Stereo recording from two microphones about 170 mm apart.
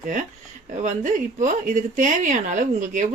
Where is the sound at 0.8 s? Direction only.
45° right (ahead or behind).